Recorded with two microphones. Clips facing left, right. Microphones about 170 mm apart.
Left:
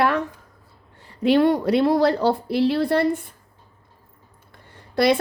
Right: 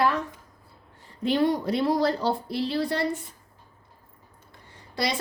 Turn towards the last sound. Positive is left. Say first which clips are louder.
# left 10 dB
turn(degrees=55)  # may be behind; listen again after turning